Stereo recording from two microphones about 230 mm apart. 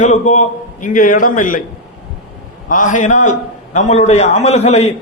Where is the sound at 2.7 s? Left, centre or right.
Left.